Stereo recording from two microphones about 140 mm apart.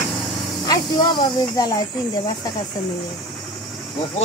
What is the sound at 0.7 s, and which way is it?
Speech, 25° left (ahead or behind).